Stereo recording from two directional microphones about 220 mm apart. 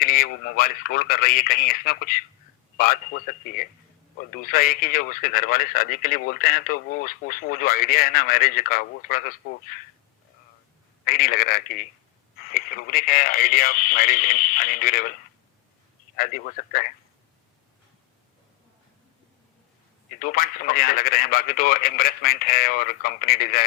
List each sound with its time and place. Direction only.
0.0 s speech: 40° left (ahead or behind)
11.0 s speech: 40° left (ahead or behind)
16.1 s speech: 40° left (ahead or behind)
20.1 s speech: 40° left (ahead or behind)